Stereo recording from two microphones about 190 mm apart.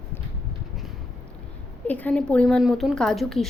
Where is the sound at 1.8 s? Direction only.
10° left (ahead or behind).